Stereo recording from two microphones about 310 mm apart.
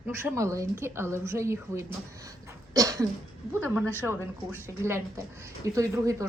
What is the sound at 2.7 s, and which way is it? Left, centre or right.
Cough, centre.